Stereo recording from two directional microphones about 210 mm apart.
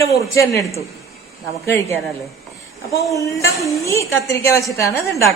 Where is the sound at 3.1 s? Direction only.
15° left (ahead or behind).